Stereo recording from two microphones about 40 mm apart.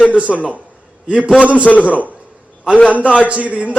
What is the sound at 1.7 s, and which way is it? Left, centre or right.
Speech, centre.